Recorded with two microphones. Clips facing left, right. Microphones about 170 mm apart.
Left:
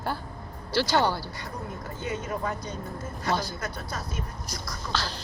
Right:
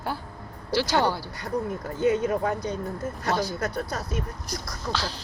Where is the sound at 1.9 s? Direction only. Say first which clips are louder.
Right 10 dB; 50° right (ahead or behind).